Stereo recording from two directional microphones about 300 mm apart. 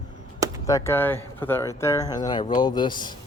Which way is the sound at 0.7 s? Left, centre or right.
Centre.